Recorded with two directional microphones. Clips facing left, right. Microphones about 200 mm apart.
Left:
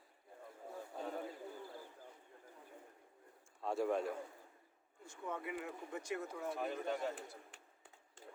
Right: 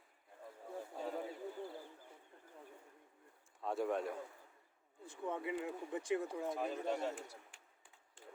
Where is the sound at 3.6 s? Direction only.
Centre (ahead or behind).